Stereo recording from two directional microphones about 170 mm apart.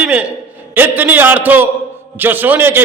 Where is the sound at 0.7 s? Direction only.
10° right (ahead or behind).